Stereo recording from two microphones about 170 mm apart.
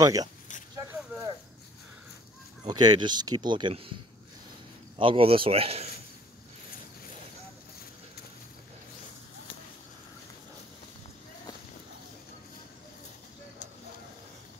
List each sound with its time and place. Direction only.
0.0 s speech: 20° right (ahead or behind)
0.7 s a sound: 20° right (ahead or behind)
2.6 s speech: 25° right (ahead or behind)
4.9 s speech: 30° right (ahead or behind)